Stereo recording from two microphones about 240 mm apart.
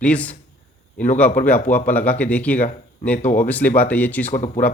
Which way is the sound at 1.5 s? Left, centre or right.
Centre.